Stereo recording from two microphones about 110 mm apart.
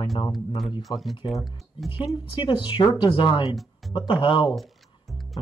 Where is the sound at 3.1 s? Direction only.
50° left (ahead or behind).